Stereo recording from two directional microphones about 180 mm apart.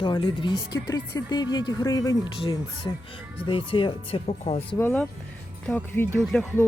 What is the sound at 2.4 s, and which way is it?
Speech, 30° left (ahead or behind).